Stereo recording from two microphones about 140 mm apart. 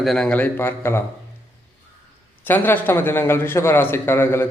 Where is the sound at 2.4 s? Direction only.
15° left (ahead or behind).